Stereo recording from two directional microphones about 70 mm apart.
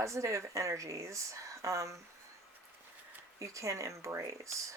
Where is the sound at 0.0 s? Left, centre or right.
Right.